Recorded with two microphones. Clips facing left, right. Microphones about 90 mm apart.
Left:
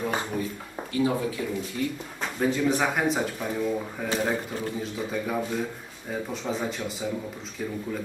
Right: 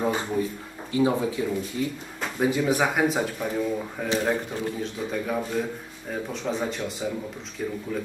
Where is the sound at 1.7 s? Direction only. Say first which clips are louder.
Left 1 dB; 65° left (ahead or behind).